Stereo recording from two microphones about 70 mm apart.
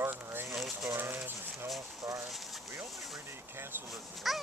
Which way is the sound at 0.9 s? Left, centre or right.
Right.